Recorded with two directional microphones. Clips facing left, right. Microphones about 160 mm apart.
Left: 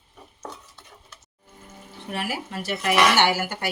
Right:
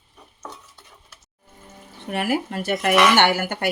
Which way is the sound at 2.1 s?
55° right (ahead or behind).